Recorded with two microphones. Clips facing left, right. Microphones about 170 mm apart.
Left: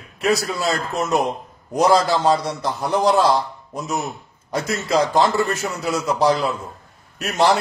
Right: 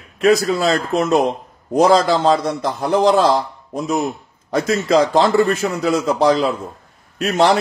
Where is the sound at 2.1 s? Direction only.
25° right (ahead or behind).